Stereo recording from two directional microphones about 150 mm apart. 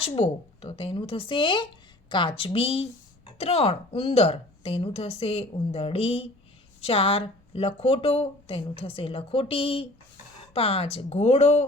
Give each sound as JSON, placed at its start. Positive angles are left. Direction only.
{"t": 0.0, "sound": "a woman's voice", "side_deg": 40}